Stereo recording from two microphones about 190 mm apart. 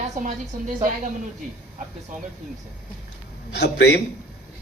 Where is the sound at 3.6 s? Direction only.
60° left (ahead or behind).